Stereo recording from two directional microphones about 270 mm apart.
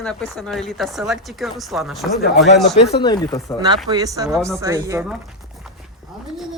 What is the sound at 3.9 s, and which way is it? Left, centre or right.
Speech, centre.